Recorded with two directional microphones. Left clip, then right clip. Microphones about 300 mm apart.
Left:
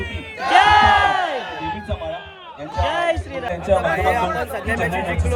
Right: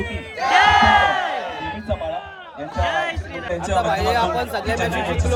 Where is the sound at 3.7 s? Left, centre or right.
Left.